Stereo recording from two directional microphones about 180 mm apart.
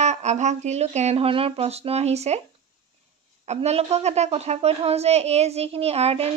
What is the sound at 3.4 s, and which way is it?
A woman's voice, 35° right (ahead or behind).